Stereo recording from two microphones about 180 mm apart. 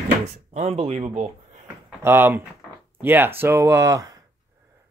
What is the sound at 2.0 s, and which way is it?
Speech, 10° right (ahead or behind).